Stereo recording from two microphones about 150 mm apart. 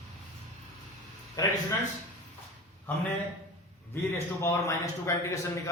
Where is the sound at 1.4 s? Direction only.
25° left (ahead or behind).